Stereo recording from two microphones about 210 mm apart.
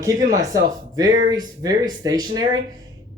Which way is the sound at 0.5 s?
15° right (ahead or behind).